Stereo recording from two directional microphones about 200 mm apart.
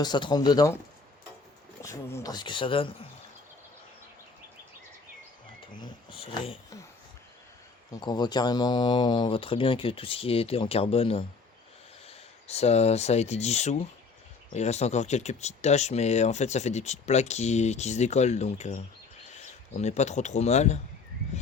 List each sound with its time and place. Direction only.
0.0 s speech: 20° left (ahead or behind)
1.8 s speech: 15° left (ahead or behind)
5.7 s speech: 25° left (ahead or behind)
8.0 s speech: 20° left (ahead or behind)